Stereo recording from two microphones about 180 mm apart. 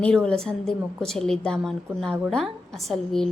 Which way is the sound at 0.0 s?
5° left (ahead or behind).